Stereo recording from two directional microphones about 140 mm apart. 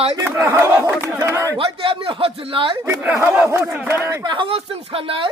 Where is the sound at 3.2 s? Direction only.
10° right (ahead or behind).